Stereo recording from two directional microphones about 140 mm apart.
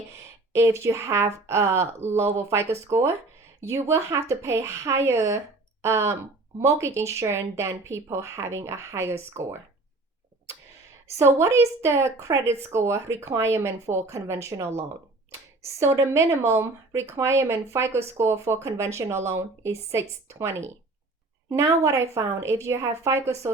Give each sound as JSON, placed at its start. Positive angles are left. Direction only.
{"t": 0.5, "sound": "a woman's voice", "side_deg": -20}
{"t": 11.2, "sound": "a woman's voice", "side_deg": -20}